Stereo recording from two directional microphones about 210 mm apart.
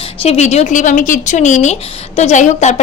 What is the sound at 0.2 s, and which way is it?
A woman's voice, 30° left (ahead or behind).